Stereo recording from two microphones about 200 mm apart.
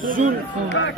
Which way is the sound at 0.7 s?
65° left (ahead or behind).